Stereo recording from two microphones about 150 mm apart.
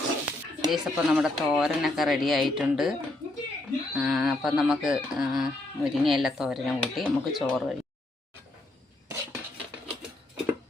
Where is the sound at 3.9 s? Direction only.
Centre (ahead or behind).